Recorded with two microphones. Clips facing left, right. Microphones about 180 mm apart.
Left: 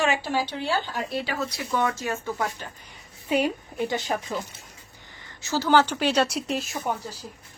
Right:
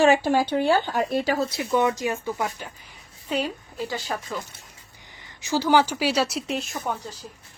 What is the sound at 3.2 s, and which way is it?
Speech, 15° left (ahead or behind).